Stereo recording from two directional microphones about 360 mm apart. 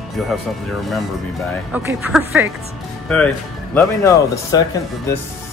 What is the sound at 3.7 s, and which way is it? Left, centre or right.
Speech, centre.